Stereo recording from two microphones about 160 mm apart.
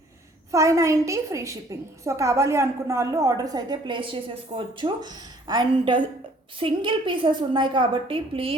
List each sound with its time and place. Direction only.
0.5 s a woman's voice: 20° right (ahead or behind); by 8.5 s 35° right (ahead or behind)